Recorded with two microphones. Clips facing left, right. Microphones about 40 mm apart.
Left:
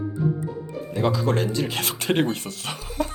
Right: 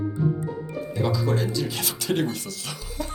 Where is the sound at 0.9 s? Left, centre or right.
Left.